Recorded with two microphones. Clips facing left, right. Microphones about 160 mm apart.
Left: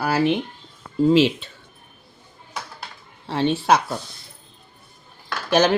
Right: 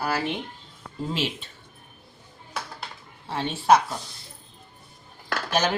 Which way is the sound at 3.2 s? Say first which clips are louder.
Left 3 dB; 90° left.